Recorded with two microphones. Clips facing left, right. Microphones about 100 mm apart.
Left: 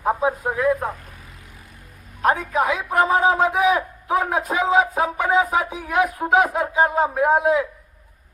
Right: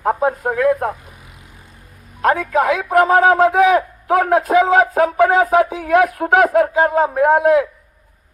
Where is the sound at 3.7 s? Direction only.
70° right (ahead or behind).